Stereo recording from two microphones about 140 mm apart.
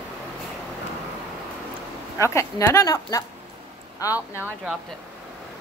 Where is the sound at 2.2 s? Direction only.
20° left (ahead or behind).